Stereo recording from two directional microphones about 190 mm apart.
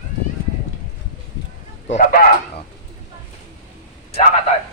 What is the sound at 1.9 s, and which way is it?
Speech, 45° left (ahead or behind).